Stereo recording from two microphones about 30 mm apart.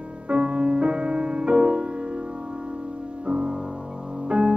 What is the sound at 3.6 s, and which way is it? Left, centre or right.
Music, right.